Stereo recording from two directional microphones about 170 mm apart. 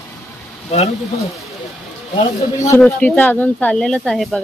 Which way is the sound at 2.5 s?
20° left (ahead or behind).